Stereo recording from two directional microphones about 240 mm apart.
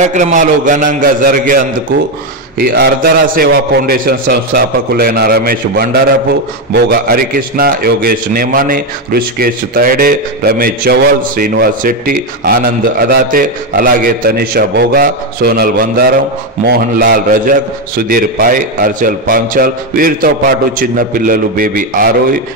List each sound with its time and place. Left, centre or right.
0.0 s a man's voice: right
2.6 s a man's voice: right